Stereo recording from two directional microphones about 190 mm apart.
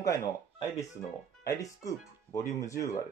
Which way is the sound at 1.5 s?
20° left (ahead or behind).